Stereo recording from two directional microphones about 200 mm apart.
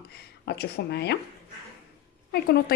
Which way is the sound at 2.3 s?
50° left (ahead or behind).